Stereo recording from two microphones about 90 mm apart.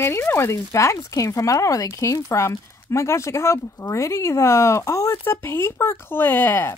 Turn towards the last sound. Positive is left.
turn(degrees=25)  # may be behind; listen again after turning